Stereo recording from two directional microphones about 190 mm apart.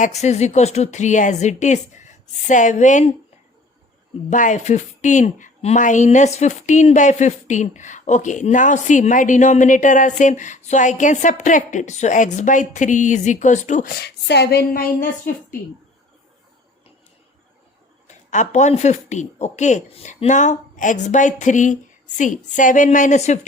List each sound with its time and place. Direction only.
0.0 s speech: 35° left (ahead or behind)
4.3 s speech: 40° left (ahead or behind)
18.1 s speech: 40° left (ahead or behind)